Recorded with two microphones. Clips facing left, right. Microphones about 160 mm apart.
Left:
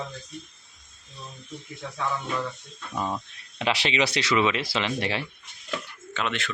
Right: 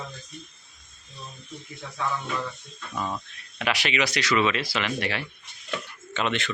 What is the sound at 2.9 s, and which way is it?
Speech, 20° left (ahead or behind).